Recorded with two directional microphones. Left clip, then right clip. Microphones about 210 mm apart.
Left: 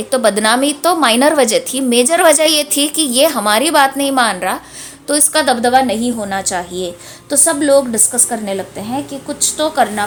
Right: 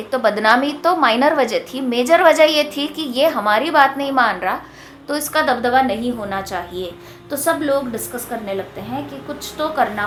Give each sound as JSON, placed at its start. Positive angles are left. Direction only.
{"t": 0.1, "sound": "a woman's voice", "side_deg": 35}